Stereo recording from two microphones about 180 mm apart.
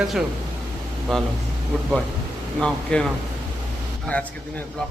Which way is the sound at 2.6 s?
5° left (ahead or behind).